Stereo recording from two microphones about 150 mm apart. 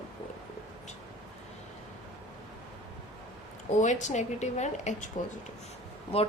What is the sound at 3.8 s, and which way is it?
Speech, 55° left (ahead or behind).